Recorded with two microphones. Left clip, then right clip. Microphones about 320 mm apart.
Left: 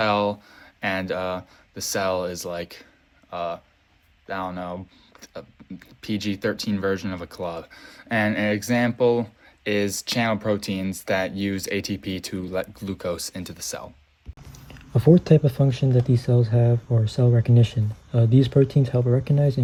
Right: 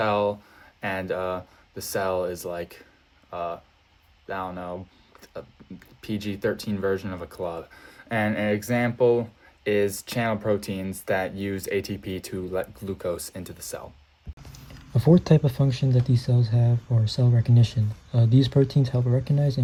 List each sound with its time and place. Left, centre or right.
0.0 s speech: centre
14.9 s speech: centre